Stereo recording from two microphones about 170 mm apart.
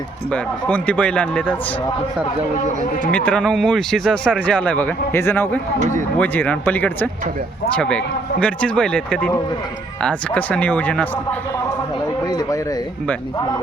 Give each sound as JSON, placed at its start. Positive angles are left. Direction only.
{"t": 0.3, "sound": "a man's voice", "side_deg": 10}
{"t": 3.1, "sound": "a man's voice", "side_deg": 5}
{"t": 12.2, "sound": "speech", "side_deg": 20}